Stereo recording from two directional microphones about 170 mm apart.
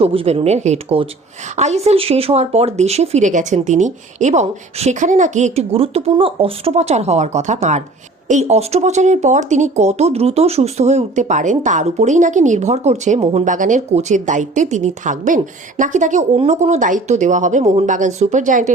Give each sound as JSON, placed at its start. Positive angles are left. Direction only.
{"t": 0.0, "sound": "speech", "side_deg": -35}